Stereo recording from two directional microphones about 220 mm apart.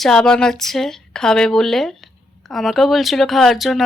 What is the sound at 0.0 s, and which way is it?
Speech, 5° left (ahead or behind).